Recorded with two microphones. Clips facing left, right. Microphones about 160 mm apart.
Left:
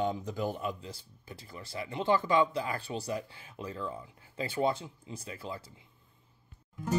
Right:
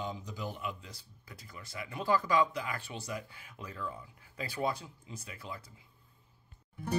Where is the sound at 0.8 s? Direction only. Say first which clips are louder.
Left 7 dB; 30° left (ahead or behind).